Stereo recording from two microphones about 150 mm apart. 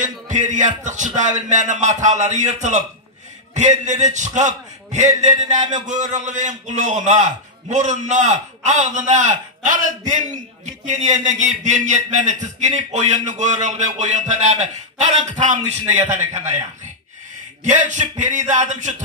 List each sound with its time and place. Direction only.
0.0 s a man's voice: 55° right (ahead or behind)
17.6 s a man's voice: 55° right (ahead or behind)